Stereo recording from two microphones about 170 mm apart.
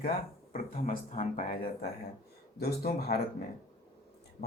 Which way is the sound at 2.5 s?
65° left (ahead or behind).